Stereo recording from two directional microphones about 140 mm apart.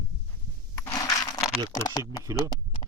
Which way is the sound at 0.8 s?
25° left (ahead or behind).